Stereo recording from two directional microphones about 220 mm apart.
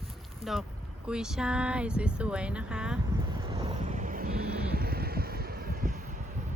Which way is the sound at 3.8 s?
35° right (ahead or behind).